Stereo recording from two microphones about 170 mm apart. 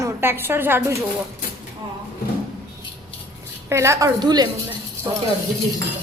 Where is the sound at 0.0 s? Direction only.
15° right (ahead or behind).